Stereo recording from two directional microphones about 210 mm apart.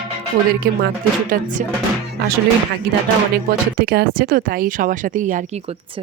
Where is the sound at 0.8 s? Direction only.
40° right (ahead or behind).